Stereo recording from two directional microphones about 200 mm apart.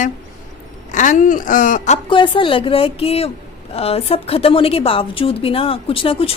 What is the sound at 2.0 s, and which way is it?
A woman's voice, 25° left (ahead or behind).